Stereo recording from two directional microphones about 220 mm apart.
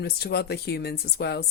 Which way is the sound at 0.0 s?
45° left (ahead or behind).